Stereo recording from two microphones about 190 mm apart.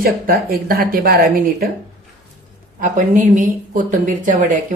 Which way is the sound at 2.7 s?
45° right (ahead or behind).